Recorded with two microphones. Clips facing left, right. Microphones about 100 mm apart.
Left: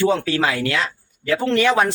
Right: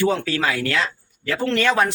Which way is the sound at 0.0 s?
25° left (ahead or behind).